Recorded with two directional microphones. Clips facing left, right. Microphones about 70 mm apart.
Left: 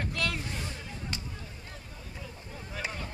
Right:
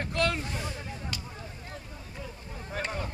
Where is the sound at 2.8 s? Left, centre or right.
Right.